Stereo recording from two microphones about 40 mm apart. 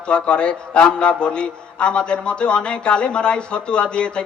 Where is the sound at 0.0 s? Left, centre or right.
Left.